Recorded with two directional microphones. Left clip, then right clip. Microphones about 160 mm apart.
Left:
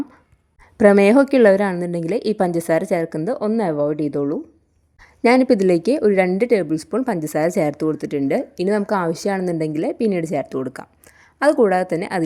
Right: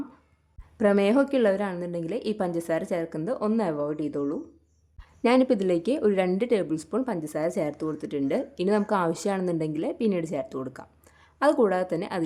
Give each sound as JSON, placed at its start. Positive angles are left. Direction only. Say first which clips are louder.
{"t": 0.8, "sound": "a woman's voice", "louder": "left 9 dB", "side_deg": 40}
{"t": 11.2, "sound": "a woman's voice", "louder": "left 6 dB", "side_deg": 20}